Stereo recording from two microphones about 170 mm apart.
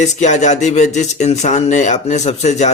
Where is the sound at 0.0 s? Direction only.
45° left (ahead or behind).